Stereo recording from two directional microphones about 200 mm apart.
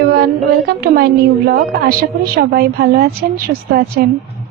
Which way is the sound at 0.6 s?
50° right (ahead or behind).